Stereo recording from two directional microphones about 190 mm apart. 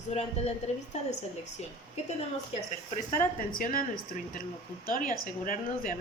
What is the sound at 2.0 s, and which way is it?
Speech, 35° left (ahead or behind).